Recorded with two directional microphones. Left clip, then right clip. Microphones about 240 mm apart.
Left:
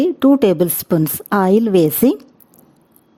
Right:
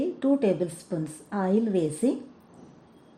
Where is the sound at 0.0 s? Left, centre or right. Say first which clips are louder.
Left 12 dB; left.